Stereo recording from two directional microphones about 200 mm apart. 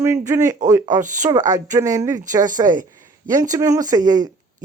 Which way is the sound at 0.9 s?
40° right (ahead or behind).